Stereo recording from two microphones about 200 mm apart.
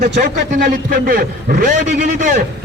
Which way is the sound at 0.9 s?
45° right (ahead or behind).